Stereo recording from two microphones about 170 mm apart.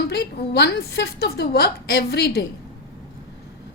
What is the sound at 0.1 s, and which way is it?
A woman's voice, 75° left (ahead or behind).